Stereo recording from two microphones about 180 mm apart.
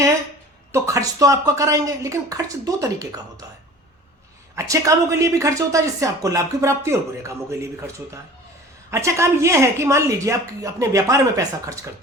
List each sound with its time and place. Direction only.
0.7 s a woman's voice: 15° right (ahead or behind)
4.5 s a woman's voice: 15° right (ahead or behind)